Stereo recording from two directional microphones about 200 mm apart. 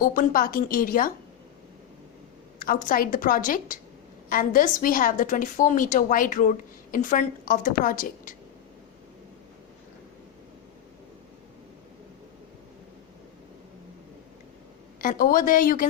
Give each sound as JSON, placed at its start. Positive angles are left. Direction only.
{"t": 0.0, "sound": "a woman's voice", "side_deg": 45}
{"t": 2.6, "sound": "a woman's voice", "side_deg": 45}
{"t": 15.0, "sound": "a woman's voice", "side_deg": 45}